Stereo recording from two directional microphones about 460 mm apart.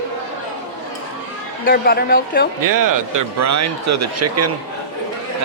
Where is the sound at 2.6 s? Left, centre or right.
Right.